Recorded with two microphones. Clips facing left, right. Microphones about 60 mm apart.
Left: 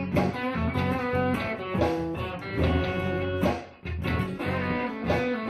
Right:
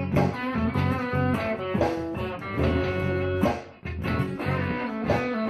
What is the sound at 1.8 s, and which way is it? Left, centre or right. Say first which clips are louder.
Music: left 3 dB; centre.